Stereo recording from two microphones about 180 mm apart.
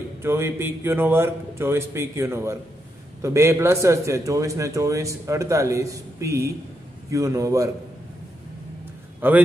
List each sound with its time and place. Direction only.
0.2 s a man's voice: 15° right (ahead or behind)
9.2 s a man's voice: 10° right (ahead or behind)